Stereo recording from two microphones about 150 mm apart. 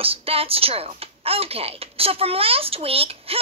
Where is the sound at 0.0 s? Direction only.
40° right (ahead or behind).